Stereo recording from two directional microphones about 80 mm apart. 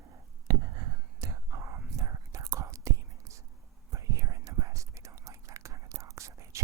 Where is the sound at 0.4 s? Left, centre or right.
Right.